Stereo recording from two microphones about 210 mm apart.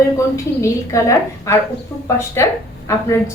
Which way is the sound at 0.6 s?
15° left (ahead or behind).